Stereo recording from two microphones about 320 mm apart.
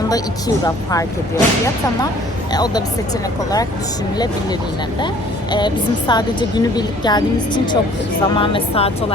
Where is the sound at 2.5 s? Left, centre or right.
Centre.